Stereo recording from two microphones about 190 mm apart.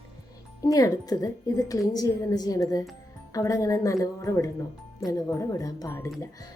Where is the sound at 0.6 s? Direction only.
20° left (ahead or behind).